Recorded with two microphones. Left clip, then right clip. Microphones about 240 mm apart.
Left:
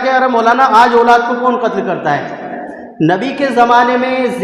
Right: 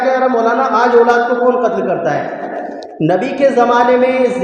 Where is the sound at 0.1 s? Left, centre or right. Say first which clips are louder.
Left 5 dB; left.